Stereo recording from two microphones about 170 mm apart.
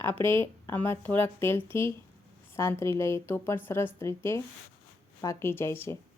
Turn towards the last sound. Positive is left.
turn(degrees=15)  # may be behind; listen again after turning